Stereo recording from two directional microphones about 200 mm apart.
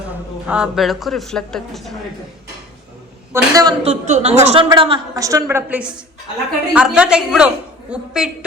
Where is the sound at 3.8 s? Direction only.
35° right (ahead or behind).